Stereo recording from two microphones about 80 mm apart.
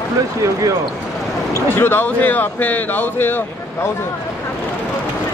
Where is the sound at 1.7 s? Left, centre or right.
Left.